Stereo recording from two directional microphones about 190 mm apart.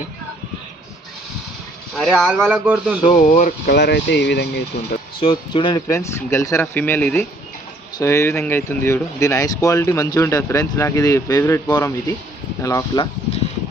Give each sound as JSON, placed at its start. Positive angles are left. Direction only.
{"t": 1.9, "sound": "speech", "side_deg": 0}
{"t": 2.5, "sound": "speech", "side_deg": -10}
{"t": 3.2, "sound": "speech", "side_deg": 45}
{"t": 3.8, "sound": "speech", "side_deg": 65}
{"t": 5.2, "sound": "speech", "side_deg": 30}